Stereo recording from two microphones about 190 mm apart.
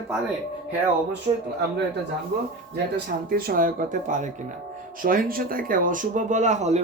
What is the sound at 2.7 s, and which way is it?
Speech, 50° right (ahead or behind).